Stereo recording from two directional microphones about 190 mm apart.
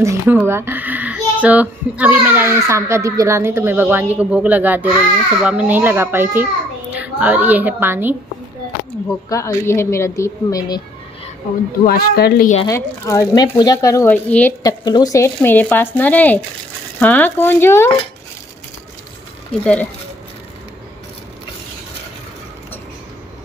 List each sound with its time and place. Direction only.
0.0 s a child's voice: 15° right (ahead or behind)
9.3 s speech: 15° left (ahead or behind)
11.8 s speech: 55° left (ahead or behind)
12.6 s speech: 15° left (ahead or behind)
14.6 s speech: 20° left (ahead or behind)
19.5 s speech: 5° left (ahead or behind)